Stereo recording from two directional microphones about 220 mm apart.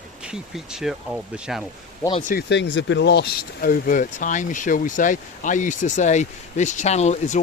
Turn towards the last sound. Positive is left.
turn(degrees=30)  # may be behind; listen again after turning